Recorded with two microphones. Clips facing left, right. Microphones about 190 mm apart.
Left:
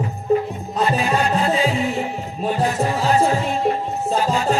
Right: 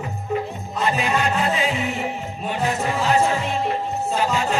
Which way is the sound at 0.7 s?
35° left (ahead or behind).